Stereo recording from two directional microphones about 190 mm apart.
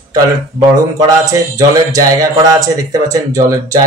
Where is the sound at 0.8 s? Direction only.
20° right (ahead or behind).